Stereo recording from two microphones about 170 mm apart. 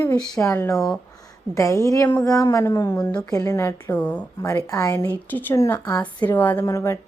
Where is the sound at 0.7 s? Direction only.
Centre (ahead or behind).